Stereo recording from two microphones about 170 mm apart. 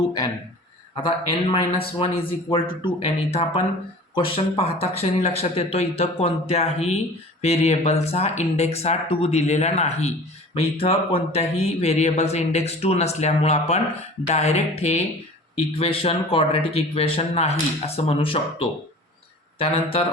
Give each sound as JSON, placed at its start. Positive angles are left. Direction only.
{"t": 1.0, "sound": "speech", "side_deg": 30}